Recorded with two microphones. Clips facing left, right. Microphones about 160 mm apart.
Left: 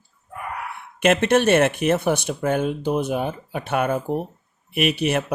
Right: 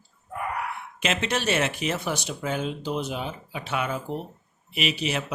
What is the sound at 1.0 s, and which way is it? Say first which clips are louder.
Speech: left 10 dB; 55° left (ahead or behind).